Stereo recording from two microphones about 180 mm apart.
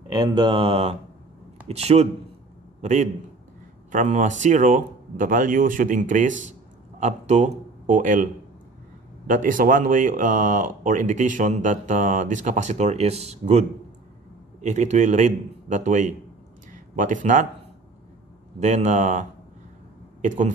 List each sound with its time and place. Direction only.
0.1 s a man's voice: 25° right (ahead or behind); by 8.3 s 45° right (ahead or behind)
9.3 s speech: 50° right (ahead or behind)
18.6 s speech: 40° right (ahead or behind)